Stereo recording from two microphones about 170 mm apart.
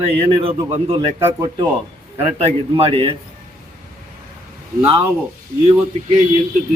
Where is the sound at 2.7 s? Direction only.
35° right (ahead or behind).